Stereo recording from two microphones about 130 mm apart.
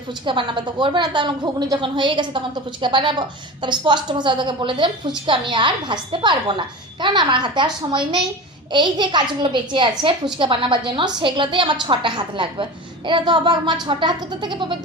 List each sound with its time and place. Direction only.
0.1 s a woman's voice: 35° right (ahead or behind)